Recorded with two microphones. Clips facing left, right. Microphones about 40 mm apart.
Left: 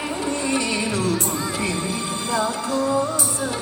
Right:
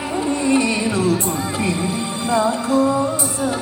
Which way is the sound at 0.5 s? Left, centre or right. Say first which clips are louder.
Right 6 dB; right.